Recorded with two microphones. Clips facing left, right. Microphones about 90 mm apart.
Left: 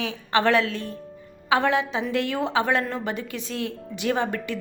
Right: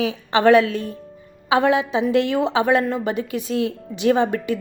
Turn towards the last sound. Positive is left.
turn(degrees=-20)  # may be behind; listen again after turning